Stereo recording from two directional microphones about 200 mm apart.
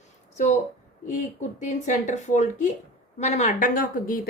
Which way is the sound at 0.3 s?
35° left (ahead or behind).